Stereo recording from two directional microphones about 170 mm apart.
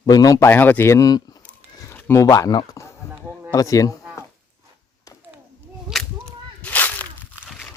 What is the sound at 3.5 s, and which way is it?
Speech, 20° left (ahead or behind).